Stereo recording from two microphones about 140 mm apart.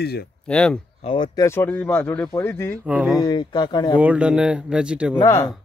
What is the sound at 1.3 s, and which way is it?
Speech, 20° left (ahead or behind).